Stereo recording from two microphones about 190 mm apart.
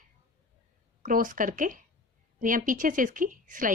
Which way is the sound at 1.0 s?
45° right (ahead or behind).